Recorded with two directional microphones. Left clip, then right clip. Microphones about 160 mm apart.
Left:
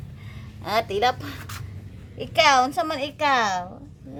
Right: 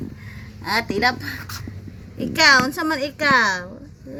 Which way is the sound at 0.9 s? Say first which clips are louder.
Right 2 dB; 30° left (ahead or behind).